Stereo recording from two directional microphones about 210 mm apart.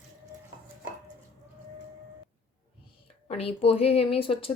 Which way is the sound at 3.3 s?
30° left (ahead or behind).